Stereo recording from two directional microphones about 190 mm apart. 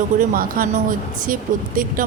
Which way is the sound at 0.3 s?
50° right (ahead or behind).